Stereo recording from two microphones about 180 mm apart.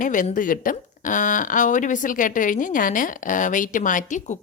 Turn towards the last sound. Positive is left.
turn(degrees=45)  # may be behind; listen again after turning